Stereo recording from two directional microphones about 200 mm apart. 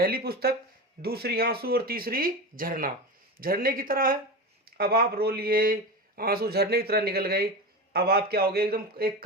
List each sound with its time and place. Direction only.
0.0 s speech: 50° right (ahead or behind)